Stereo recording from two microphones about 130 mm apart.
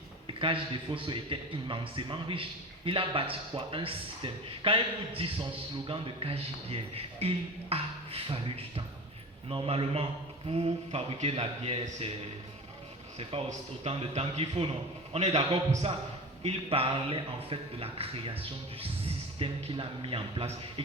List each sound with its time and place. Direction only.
0.3 s a man's voice: 40° right (ahead or behind)
13.8 s speech: 50° right (ahead or behind)